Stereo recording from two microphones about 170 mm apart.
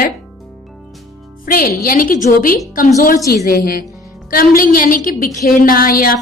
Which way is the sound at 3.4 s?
60° left (ahead or behind).